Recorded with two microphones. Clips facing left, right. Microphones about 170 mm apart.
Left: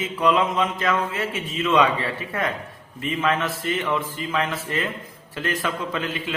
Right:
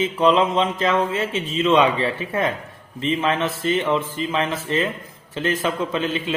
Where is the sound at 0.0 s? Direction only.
25° right (ahead or behind).